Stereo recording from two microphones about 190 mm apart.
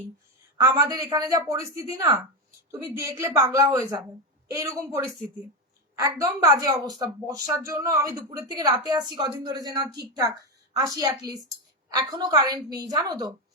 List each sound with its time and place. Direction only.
0.6 s a woman's voice: 20° right (ahead or behind)